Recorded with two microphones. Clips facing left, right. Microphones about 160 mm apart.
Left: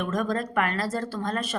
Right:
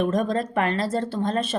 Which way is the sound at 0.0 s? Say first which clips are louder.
Right 4 dB; 25° right (ahead or behind).